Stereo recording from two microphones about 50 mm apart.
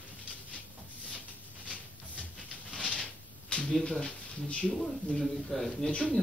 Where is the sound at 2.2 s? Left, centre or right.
Left.